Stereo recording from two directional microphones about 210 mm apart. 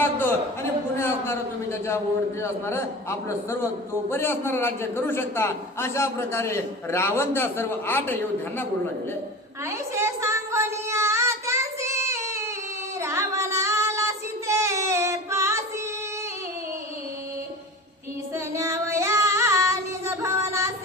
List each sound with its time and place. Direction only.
0.0 s a sound: 10° left (ahead or behind)
0.9 s a man's voice: 10° left (ahead or behind)
9.6 s child singing: 15° right (ahead or behind)
18.3 s child singing: 15° right (ahead or behind)